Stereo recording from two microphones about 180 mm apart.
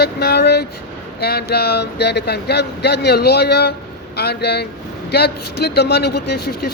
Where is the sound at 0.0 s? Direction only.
65° left (ahead or behind).